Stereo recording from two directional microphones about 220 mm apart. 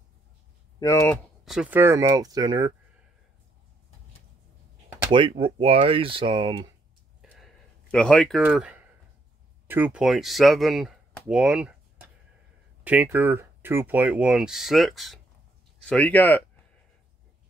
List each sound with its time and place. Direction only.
0.7 s speech: 15° left (ahead or behind)
1.4 s speech: 5° right (ahead or behind)
5.1 s speech: 25° right (ahead or behind)
7.2 s a sound: centre (ahead or behind)
8.4 s speech: 5° right (ahead or behind)